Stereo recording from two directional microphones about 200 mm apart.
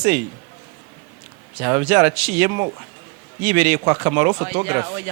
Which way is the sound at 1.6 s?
15° right (ahead or behind).